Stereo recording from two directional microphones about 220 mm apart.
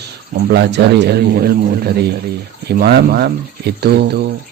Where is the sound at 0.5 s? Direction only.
50° right (ahead or behind).